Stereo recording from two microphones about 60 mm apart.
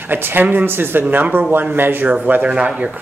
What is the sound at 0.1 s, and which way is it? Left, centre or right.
Speech, right.